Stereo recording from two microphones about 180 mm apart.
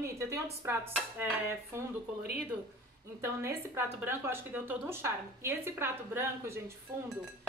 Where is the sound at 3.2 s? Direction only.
15° right (ahead or behind).